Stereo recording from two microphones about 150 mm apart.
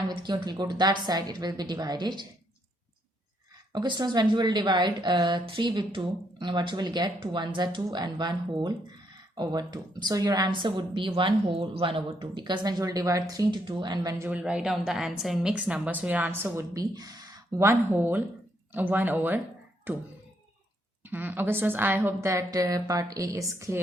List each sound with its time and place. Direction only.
0.1 s a woman's voice: 30° right (ahead or behind)
3.7 s a woman's voice: 30° right (ahead or behind)
14.3 s a woman's voice: 10° right (ahead or behind)